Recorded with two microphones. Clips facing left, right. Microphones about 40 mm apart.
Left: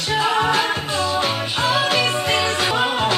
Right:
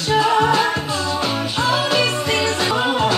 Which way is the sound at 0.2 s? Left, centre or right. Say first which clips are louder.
Right 2 dB; left.